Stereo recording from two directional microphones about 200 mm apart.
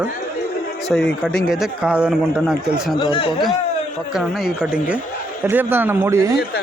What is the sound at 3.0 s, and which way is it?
Speech, 25° left (ahead or behind).